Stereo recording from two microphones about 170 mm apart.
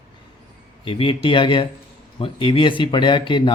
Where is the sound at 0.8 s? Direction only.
30° left (ahead or behind).